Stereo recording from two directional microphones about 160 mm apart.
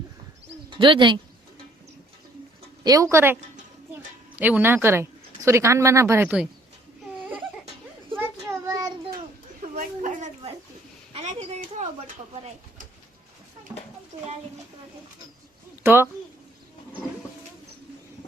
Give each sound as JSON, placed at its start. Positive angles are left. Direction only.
{"t": 0.7, "sound": "speech", "side_deg": -30}
{"t": 2.8, "sound": "a woman's voice", "side_deg": -20}
{"t": 6.2, "sound": "speech", "side_deg": -5}
{"t": 8.4, "sound": "child singing", "side_deg": -20}
{"t": 9.6, "sound": "a sound", "side_deg": -50}
{"t": 11.1, "sound": "speech", "side_deg": -45}
{"t": 13.7, "sound": "a child's voice", "side_deg": -20}
{"t": 15.8, "sound": "speech", "side_deg": -15}